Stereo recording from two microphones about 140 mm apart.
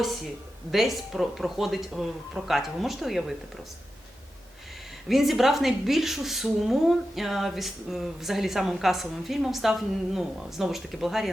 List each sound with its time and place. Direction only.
0.7 s a woman's voice: centre (ahead or behind)
5.0 s a woman's voice: centre (ahead or behind)